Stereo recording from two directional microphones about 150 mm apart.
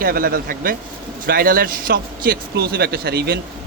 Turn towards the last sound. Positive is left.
turn(degrees=-90)